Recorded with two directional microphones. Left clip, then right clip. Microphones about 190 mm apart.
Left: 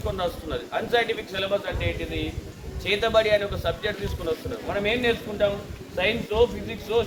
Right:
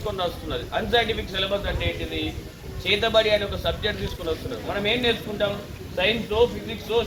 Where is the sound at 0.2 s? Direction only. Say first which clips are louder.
Right 1 dB; 20° left (ahead or behind).